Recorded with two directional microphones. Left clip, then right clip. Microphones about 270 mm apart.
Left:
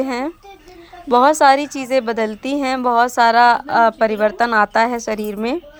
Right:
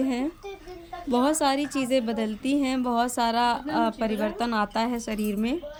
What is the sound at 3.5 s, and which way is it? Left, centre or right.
Speech, left.